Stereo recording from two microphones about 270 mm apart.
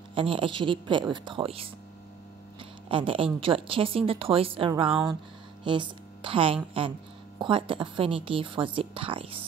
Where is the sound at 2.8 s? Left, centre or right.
Centre.